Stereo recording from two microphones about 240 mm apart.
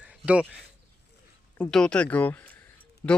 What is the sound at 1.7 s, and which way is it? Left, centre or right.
Speech, centre.